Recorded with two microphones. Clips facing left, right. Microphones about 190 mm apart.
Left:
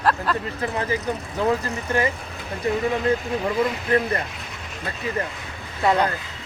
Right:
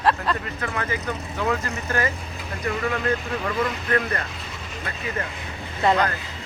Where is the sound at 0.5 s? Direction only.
30° left (ahead or behind).